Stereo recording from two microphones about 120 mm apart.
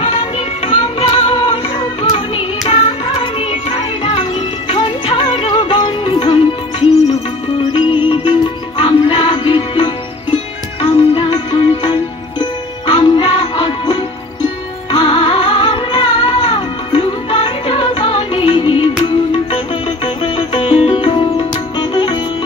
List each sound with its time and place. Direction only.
0.0 s music: 45° left (ahead or behind)